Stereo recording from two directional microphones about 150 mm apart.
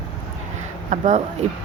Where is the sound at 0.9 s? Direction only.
50° right (ahead or behind).